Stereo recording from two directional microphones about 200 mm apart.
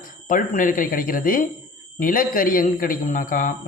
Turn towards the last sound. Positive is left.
turn(degrees=45)  # may be behind; listen again after turning